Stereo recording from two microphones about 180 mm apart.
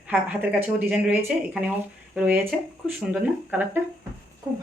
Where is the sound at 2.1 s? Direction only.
10° right (ahead or behind).